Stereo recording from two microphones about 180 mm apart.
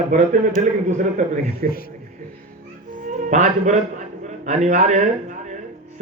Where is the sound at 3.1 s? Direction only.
40° right (ahead or behind).